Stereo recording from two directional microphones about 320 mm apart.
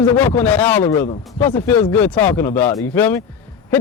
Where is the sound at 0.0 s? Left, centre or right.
Centre.